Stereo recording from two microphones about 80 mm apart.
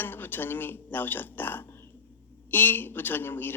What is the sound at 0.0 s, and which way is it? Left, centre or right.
A man's voice, left.